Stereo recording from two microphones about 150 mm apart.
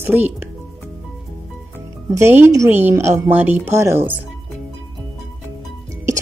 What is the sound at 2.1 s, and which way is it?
Speech, 15° right (ahead or behind).